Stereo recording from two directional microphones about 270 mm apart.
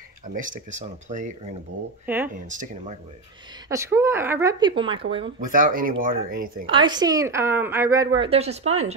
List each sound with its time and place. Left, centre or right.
0.3 s speech: right
2.0 s a woman's voice: centre
2.5 s speech: right
3.6 s a woman's voice: centre
5.4 s speech: right
6.6 s a woman's voice: centre